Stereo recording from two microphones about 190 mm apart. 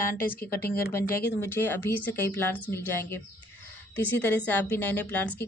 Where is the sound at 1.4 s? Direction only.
10° left (ahead or behind).